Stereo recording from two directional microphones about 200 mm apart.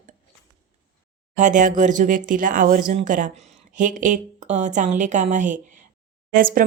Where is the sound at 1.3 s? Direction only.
40° right (ahead or behind).